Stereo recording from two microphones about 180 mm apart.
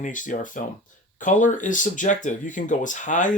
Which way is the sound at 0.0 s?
45° left (ahead or behind).